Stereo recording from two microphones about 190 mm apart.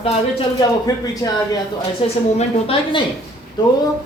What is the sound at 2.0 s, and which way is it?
A woman's voice, 30° left (ahead or behind).